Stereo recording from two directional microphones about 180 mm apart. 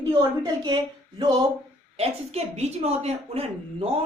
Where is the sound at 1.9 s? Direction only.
35° right (ahead or behind).